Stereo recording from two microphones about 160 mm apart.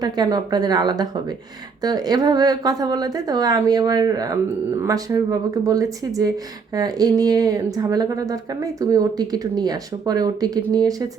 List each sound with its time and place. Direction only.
0.0 s speech: 25° right (ahead or behind)